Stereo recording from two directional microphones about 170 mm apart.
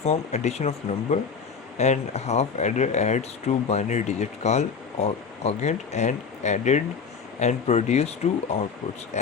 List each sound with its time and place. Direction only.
0.0 s speech: 40° left (ahead or behind)